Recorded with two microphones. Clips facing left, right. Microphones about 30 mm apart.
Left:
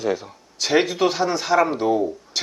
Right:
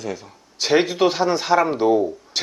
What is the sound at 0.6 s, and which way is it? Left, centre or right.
Speech, centre.